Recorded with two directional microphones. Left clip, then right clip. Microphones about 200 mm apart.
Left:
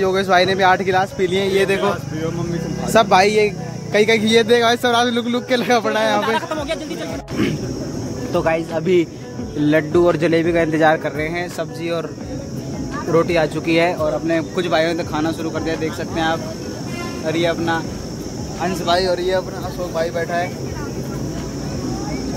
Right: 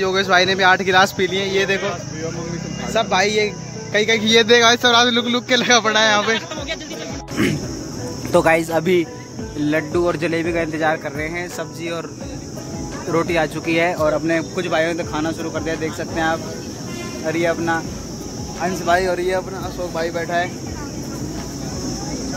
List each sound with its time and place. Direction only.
0.0 s speech: 5° left (ahead or behind)
1.3 s speech: 10° left (ahead or behind)
2.9 s speech: 10° left (ahead or behind)
6.3 s speech: 25° left (ahead or behind)
8.3 s speech: 20° right (ahead or behind)
9.6 s speech: 5° left (ahead or behind)
13.1 s speech: 5° right (ahead or behind); by 19.4 s 25° right (ahead or behind)
20.0 s speech: 35° right (ahead or behind)